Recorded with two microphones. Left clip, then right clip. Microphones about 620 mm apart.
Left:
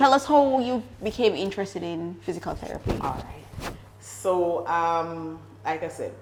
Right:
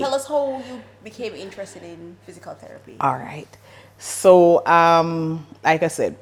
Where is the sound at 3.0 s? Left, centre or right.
Right.